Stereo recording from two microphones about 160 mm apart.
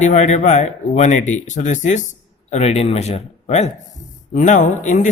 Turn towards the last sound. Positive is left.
turn(degrees=50)  # may be behind; listen again after turning